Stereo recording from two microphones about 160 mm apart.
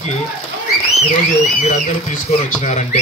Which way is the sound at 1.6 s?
50° left (ahead or behind).